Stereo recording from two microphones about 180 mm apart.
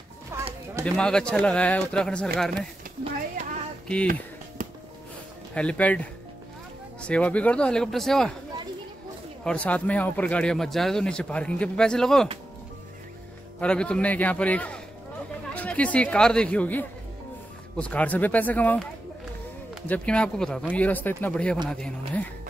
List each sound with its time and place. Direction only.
0.3 s clip-clop: 15° right (ahead or behind)
0.8 s speech: 5° left (ahead or behind)
3.8 s speech: 5° left (ahead or behind)
4.6 s music: 45° right (ahead or behind)
5.5 s speech: 5° left (ahead or behind)
7.0 s speech: 5° left (ahead or behind)
9.4 s speech: 5° left (ahead or behind)
13.6 s a man's voice: 5° left (ahead or behind)
19.9 s a man's voice: 5° left (ahead or behind)